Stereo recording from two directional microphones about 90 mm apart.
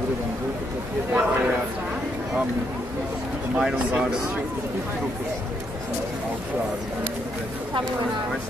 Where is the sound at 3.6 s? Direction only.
10° right (ahead or behind).